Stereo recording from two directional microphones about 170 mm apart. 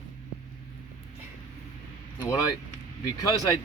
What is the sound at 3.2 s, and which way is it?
Speech, 20° left (ahead or behind).